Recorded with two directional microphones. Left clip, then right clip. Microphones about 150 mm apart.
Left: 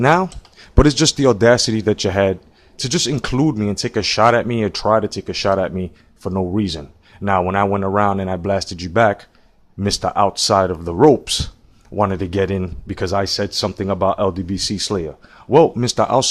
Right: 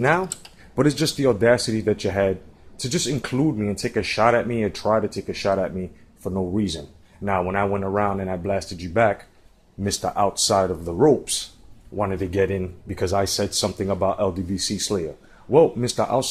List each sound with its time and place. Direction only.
0.0 s speech: 55° left (ahead or behind)
11.9 s speech: 60° left (ahead or behind)